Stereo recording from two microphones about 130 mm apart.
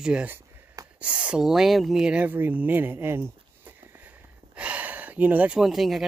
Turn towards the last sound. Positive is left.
turn(degrees=0)  # may be behind; listen again after turning